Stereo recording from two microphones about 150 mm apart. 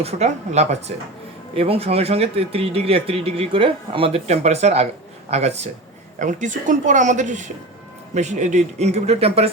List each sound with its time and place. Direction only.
0.0 s a man's voice: 45° right (ahead or behind)